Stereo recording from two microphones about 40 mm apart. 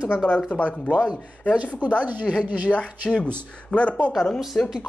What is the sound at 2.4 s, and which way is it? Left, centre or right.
Speech, right.